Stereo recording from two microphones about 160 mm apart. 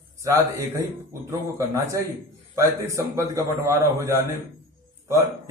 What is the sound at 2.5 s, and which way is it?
A man's voice, 15° right (ahead or behind).